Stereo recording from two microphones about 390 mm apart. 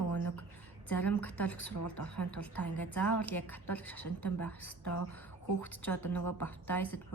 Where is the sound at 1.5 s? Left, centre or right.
Left.